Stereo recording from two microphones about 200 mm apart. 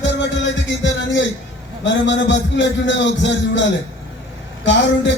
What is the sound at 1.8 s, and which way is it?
A man's voice, 65° left (ahead or behind).